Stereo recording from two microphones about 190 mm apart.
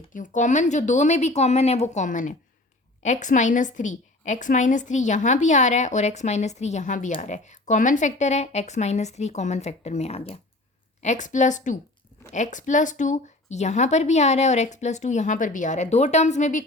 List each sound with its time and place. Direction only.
0.1 s a woman's voice: 40° left (ahead or behind)